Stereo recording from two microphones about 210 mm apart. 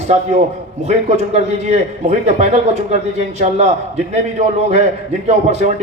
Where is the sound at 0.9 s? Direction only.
30° right (ahead or behind).